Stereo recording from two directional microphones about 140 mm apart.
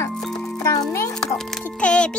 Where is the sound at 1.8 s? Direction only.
5° left (ahead or behind).